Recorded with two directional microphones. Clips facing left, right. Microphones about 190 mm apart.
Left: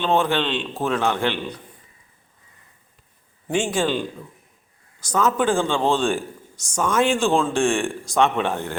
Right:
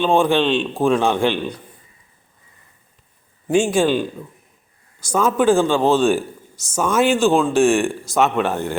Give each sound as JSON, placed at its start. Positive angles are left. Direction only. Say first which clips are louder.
{"t": 0.0, "sound": "speech", "louder": "right 5 dB", "side_deg": -10}
{"t": 3.5, "sound": "speech", "louder": "right 6 dB", "side_deg": -10}